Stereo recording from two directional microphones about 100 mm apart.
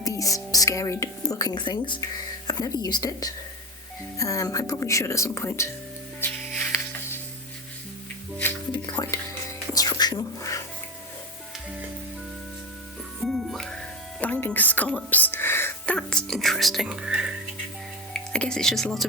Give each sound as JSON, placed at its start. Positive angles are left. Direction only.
{"t": 0.0, "sound": "a woman's voice", "side_deg": 35}
{"t": 6.6, "sound": "music", "side_deg": 20}
{"t": 9.0, "sound": "speech", "side_deg": 40}
{"t": 9.7, "sound": "a sound", "side_deg": 40}
{"t": 13.1, "sound": "music", "side_deg": 0}
{"t": 14.2, "sound": "speech", "side_deg": 15}
{"t": 15.9, "sound": "speech", "side_deg": 10}
{"t": 18.1, "sound": "speech", "side_deg": 5}